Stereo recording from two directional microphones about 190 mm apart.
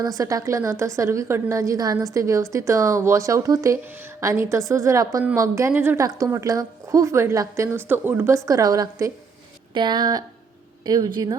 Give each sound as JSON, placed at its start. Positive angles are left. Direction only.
{"t": 0.0, "sound": "a woman's voice", "side_deg": -20}